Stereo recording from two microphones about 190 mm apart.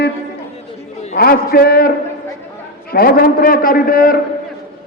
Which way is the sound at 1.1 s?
55° left (ahead or behind).